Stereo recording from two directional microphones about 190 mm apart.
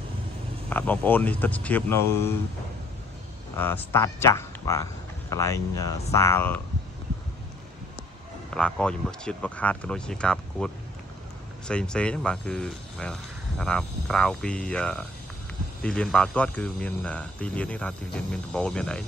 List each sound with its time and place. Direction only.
0.7 s speech: 10° left (ahead or behind)
3.5 s speech: 10° left (ahead or behind)
8.5 s speech: 5° left (ahead or behind)